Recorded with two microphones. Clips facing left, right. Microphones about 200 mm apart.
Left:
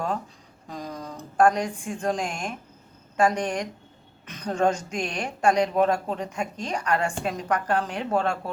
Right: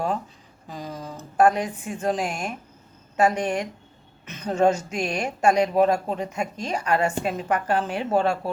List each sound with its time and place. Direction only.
0.7 s a woman's voice: 5° right (ahead or behind)